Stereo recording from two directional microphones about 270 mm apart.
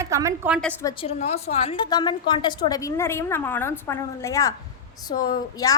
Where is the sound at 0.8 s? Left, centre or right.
Centre.